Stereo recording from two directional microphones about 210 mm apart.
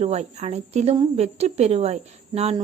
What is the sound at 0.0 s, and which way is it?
Speech, 30° right (ahead or behind).